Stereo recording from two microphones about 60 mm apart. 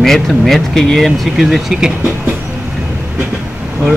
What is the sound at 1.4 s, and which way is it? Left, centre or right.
Speech, centre.